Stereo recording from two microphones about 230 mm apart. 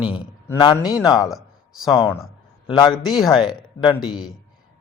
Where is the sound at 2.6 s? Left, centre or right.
Centre.